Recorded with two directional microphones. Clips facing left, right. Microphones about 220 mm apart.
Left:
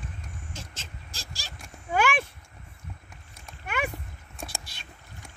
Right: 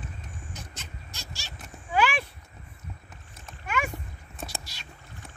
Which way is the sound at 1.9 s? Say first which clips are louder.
Even; 50° left (ahead or behind).